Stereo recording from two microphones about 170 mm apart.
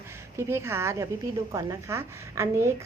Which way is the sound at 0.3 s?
15° right (ahead or behind).